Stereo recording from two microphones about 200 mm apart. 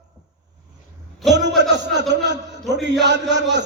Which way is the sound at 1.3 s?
60° right (ahead or behind).